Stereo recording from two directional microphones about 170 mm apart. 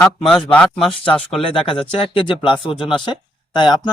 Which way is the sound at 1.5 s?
30° left (ahead or behind).